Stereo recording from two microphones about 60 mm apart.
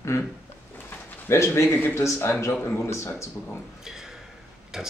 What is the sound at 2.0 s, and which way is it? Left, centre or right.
Speech, left.